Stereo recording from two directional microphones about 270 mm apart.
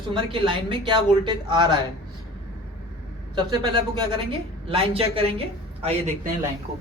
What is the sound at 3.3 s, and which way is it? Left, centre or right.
A woman's voice, centre.